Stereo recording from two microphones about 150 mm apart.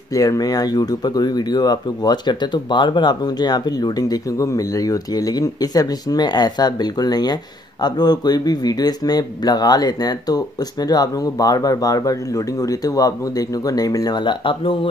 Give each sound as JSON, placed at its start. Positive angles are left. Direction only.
{"t": 0.1, "sound": "speech", "side_deg": 25}